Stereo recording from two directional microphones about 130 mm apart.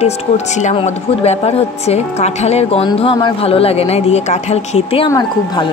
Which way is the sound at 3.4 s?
50° left (ahead or behind).